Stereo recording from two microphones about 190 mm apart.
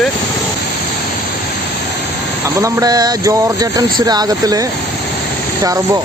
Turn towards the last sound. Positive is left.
turn(degrees=-20)  # may be behind; listen again after turning